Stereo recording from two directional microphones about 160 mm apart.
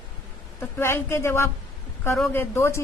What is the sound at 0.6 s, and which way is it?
A woman's voice, 15° left (ahead or behind).